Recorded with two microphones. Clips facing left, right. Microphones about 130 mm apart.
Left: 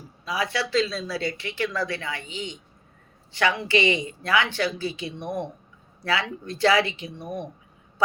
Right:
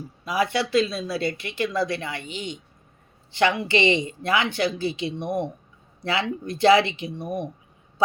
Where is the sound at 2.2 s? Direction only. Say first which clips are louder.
Right 2 dB; 65° right (ahead or behind).